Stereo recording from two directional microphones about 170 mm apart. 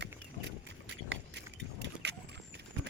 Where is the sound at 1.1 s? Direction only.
90° right.